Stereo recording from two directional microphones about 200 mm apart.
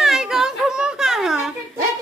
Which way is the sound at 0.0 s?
Centre (ahead or behind).